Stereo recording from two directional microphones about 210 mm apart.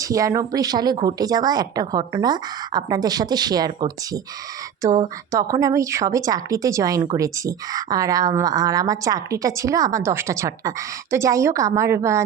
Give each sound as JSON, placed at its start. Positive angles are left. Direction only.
{"t": 0.0, "sound": "a woman's voice", "side_deg": -15}